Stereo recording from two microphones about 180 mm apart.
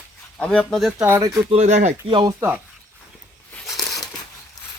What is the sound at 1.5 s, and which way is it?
Speech, 40° right (ahead or behind).